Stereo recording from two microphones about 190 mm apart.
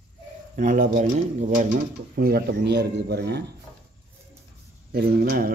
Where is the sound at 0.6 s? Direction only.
45° right (ahead or behind).